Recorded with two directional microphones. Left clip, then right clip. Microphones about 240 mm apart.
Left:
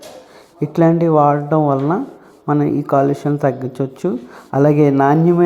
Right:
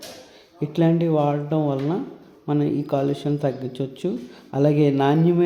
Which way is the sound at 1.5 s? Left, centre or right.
Centre.